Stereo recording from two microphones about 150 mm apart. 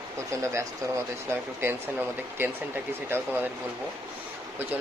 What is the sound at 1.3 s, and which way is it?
A man's voice, 15° right (ahead or behind).